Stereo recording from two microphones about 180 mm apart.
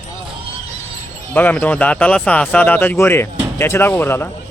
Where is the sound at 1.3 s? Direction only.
10° left (ahead or behind).